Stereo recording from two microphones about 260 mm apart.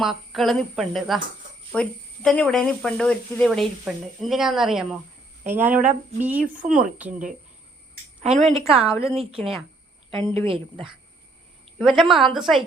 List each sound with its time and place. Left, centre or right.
0.0 s a woman's voice: centre
7.1 s a woman's voice: right
8.9 s a woman's voice: centre
9.4 s speech: centre
10.4 s a woman's voice: right
11.8 s speech: centre